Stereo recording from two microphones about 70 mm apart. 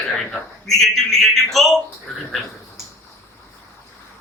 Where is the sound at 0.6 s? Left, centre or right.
Centre.